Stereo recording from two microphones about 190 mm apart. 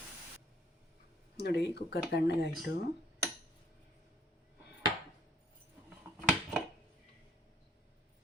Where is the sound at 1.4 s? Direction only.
60° left (ahead or behind).